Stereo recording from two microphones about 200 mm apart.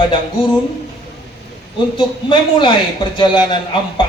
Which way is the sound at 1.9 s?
25° left (ahead or behind).